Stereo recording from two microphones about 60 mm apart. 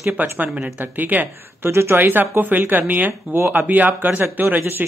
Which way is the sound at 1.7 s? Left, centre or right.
Right.